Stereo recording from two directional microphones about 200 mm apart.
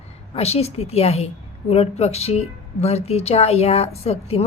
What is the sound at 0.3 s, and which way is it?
A woman's voice, 30° left (ahead or behind).